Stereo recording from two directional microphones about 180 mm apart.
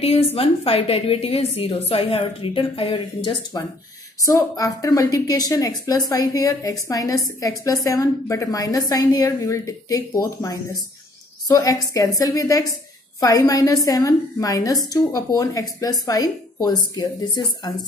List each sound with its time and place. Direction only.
0.0 s a woman's voice: 35° left (ahead or behind)